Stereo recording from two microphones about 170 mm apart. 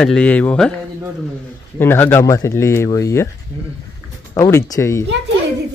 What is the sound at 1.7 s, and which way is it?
Speech, 15° left (ahead or behind).